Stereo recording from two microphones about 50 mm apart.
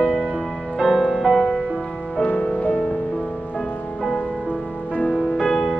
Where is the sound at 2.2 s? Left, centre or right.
Left.